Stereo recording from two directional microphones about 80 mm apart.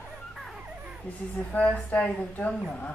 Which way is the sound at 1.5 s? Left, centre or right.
Centre.